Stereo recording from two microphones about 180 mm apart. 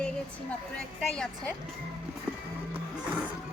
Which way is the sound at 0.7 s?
5° left (ahead or behind).